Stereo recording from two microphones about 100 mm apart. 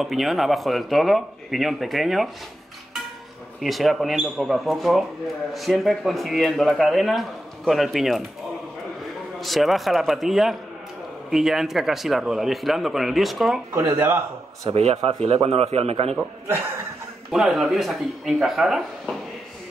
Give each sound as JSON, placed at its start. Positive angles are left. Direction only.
{"t": 0.0, "sound": "a man's voice", "side_deg": 0}
{"t": 3.6, "sound": "a man's voice", "side_deg": 0}
{"t": 9.4, "sound": "a man's voice", "side_deg": 0}
{"t": 13.7, "sound": "speech", "side_deg": -25}
{"t": 14.7, "sound": "a man's voice", "side_deg": -90}
{"t": 16.2, "sound": "speech", "side_deg": -20}
{"t": 17.3, "sound": "a man's voice", "side_deg": 0}